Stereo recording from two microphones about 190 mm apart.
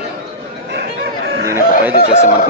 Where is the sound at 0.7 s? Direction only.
60° right (ahead or behind).